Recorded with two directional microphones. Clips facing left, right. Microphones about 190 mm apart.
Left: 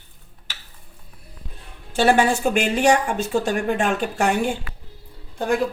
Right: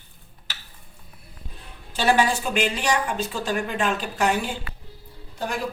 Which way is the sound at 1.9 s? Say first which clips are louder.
Left 4 dB; 50° left (ahead or behind).